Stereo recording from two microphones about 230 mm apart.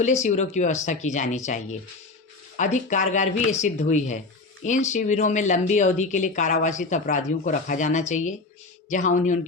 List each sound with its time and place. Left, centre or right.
0.0 s speech: left